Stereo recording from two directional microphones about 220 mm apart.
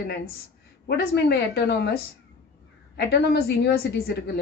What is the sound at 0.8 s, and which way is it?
Speech, 50° left (ahead or behind).